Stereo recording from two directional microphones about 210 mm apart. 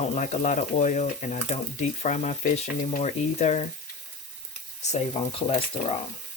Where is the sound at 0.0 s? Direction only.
35° left (ahead or behind).